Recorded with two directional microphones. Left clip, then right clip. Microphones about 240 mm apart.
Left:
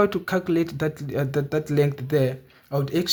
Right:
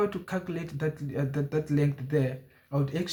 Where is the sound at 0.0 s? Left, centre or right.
Left.